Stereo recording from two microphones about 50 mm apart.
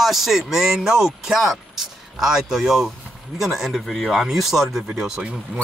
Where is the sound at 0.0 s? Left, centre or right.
Centre.